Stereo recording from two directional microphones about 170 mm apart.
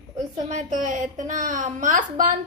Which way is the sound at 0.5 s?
45° right (ahead or behind).